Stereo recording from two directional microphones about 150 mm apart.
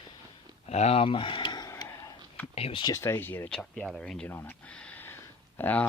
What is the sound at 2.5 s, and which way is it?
Speech, 40° left (ahead or behind).